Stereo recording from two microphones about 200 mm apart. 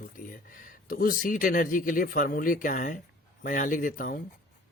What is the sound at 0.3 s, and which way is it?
Speech, 45° left (ahead or behind).